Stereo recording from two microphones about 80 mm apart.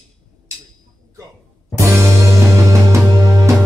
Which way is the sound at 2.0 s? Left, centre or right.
Right.